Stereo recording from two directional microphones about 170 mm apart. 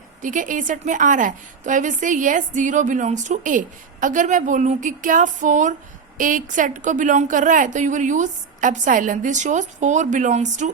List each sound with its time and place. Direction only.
0.2 s a woman's voice: 50° right (ahead or behind)